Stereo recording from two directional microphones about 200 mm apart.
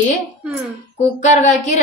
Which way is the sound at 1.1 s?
35° left (ahead or behind).